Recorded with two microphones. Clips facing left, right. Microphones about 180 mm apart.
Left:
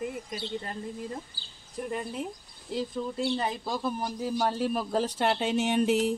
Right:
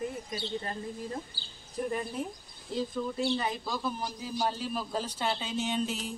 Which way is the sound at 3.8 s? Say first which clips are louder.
Left 4 dB; 50° left (ahead or behind).